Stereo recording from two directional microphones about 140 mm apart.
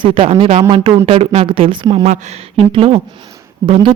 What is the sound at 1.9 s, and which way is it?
Speech, 50° right (ahead or behind).